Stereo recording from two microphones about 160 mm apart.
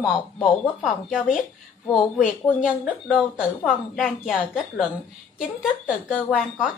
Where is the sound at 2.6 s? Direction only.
Centre (ahead or behind).